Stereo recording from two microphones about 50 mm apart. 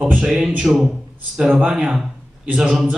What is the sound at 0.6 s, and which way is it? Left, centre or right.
Speech, centre.